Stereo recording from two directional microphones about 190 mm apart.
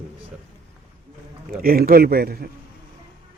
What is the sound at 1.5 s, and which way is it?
Speech, 50° right (ahead or behind).